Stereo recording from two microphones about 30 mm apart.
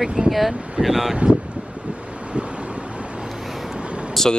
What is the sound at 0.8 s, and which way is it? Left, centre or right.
Speech, centre.